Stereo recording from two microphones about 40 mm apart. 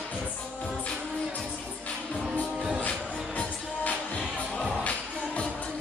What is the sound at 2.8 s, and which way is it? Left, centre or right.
Music, left.